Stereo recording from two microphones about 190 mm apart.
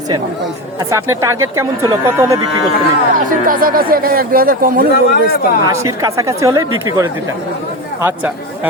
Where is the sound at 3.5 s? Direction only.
50° right (ahead or behind).